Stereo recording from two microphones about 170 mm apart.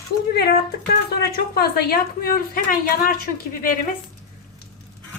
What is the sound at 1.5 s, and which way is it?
A woman's voice, 65° left (ahead or behind).